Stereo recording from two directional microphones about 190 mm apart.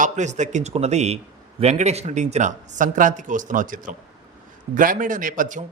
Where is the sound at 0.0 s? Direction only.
40° right (ahead or behind).